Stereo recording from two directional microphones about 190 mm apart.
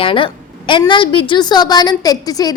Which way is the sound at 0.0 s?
25° left (ahead or behind).